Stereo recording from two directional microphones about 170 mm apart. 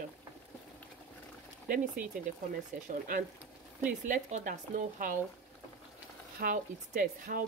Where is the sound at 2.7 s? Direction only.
45° right (ahead or behind).